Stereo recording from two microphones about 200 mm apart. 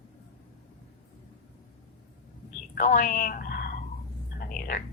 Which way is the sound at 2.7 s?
40° left (ahead or behind).